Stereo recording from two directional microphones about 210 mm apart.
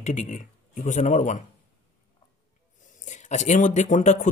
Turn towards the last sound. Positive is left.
turn(degrees=35)  # may be behind; listen again after turning